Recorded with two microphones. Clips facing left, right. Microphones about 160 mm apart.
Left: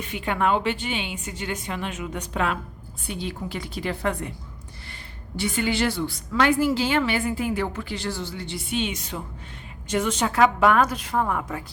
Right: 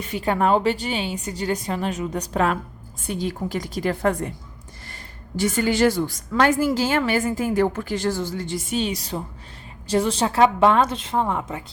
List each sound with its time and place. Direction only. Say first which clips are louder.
0.1 s a woman's voice: right 4 dB; 40° right (ahead or behind)
5.4 s a woman's voice: right 5 dB; 40° right (ahead or behind); by 11.6 s 20° right (ahead or behind)